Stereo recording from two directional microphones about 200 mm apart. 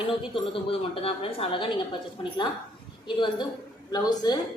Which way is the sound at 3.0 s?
25° left (ahead or behind).